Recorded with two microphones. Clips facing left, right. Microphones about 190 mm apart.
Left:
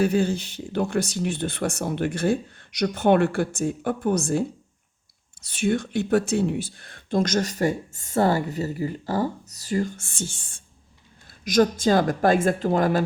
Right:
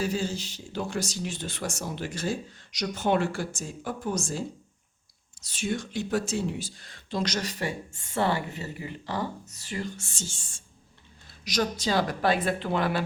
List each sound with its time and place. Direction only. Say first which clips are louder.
0.0 s speech: left 8 dB; 60° left (ahead or behind); by 13.1 s 45° left (ahead or behind)